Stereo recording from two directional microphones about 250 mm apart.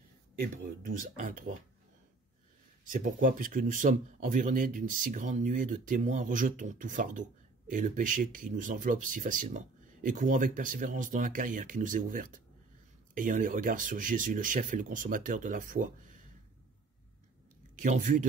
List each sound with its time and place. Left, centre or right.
0.4 s speech: right
2.8 s speech: right
17.7 s speech: right